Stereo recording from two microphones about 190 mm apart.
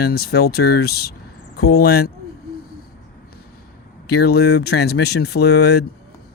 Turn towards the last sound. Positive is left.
turn(degrees=60)  # may be behind; listen again after turning